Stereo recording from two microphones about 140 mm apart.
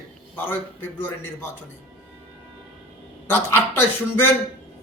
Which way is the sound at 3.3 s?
15° left (ahead or behind).